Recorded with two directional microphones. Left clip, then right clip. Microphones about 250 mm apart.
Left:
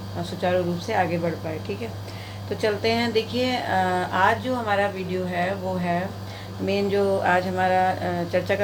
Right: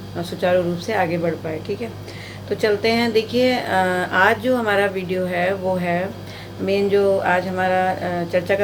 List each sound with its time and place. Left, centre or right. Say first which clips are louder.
0.2 s a woman's voice: right 5 dB; centre
6.7 s speech: right 5 dB; centre